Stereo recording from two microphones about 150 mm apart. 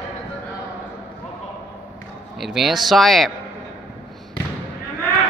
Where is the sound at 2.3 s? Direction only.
Centre (ahead or behind).